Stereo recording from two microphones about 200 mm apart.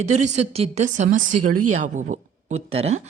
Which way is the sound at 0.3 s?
30° right (ahead or behind).